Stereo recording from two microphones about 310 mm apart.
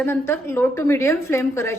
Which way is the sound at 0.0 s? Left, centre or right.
Centre.